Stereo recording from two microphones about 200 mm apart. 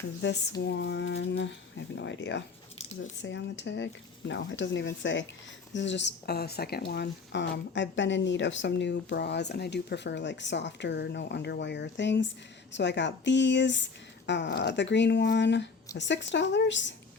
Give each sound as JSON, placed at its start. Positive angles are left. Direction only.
{"t": 0.2, "sound": "speech", "side_deg": 60}